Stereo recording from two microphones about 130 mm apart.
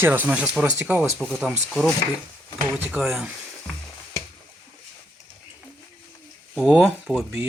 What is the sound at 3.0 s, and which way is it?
Speech, 5° right (ahead or behind).